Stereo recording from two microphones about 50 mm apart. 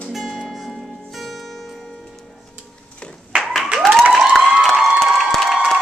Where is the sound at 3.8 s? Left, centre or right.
Centre.